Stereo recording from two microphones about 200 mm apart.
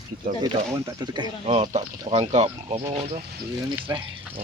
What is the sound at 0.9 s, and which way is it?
Speech, 20° right (ahead or behind).